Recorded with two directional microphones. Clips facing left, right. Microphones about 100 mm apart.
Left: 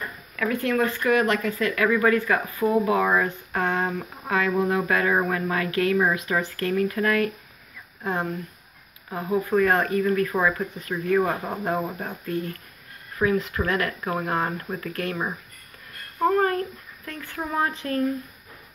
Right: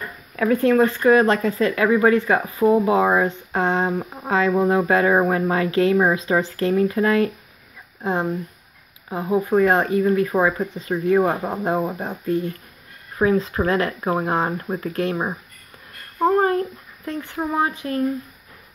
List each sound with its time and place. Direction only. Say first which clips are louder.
0.4 s speech: right 7 dB; 35° right (ahead or behind); by 18.0 s 15° right (ahead or behind)